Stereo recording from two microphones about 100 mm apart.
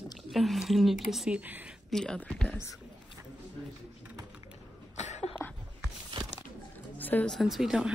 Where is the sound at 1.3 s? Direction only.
15° right (ahead or behind).